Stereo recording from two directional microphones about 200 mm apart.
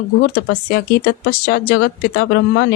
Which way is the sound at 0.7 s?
50° left (ahead or behind).